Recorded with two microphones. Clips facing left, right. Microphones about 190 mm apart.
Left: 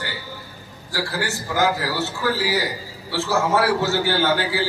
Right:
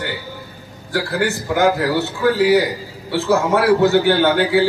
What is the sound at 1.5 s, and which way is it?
A man's voice, 60° right (ahead or behind).